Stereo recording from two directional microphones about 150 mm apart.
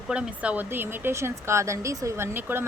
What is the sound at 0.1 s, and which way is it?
Speech, 10° right (ahead or behind).